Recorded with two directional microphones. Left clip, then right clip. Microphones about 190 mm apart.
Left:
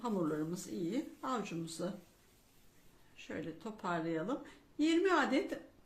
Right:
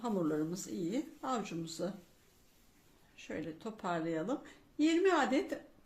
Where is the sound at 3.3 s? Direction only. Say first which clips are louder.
Right 2 dB; 15° right (ahead or behind).